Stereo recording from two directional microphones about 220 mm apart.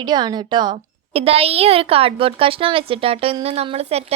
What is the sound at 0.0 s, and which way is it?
A woman's voice, 20° right (ahead or behind).